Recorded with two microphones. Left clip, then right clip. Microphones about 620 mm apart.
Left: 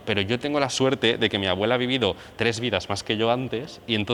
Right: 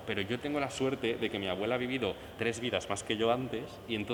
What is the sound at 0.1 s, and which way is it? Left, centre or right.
Speech, left.